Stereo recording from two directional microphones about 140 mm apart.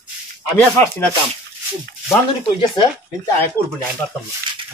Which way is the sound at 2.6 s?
35° left (ahead or behind).